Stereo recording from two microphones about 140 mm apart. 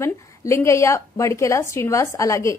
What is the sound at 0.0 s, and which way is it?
A woman's voice, 20° left (ahead or behind).